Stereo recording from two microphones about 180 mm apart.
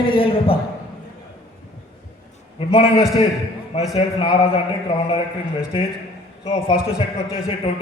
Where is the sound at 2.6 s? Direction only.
30° left (ahead or behind).